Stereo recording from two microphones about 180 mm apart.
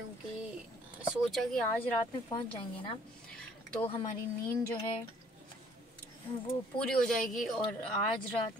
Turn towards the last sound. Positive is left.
turn(degrees=0)  # may be behind; listen again after turning